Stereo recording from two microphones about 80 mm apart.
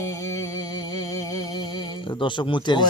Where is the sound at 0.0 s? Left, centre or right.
Left.